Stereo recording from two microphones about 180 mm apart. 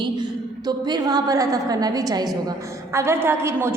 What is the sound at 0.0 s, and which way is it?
A woman's voice, 25° right (ahead or behind).